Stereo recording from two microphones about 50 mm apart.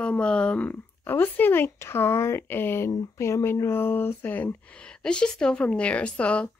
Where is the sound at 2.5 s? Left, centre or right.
Left.